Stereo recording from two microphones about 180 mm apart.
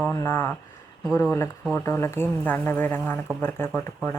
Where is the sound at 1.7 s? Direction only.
15° left (ahead or behind).